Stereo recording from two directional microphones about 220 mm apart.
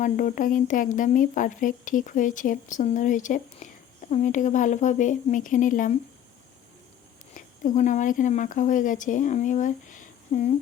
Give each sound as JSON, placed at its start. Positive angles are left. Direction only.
{"t": 0.0, "sound": "speech", "side_deg": 35}
{"t": 7.3, "sound": "a woman's voice", "side_deg": 35}